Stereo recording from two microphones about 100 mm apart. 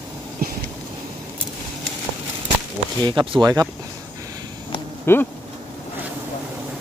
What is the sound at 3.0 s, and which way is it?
Speech, 50° right (ahead or behind).